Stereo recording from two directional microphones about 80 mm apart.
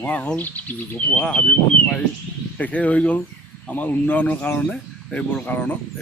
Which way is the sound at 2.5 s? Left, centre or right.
Centre.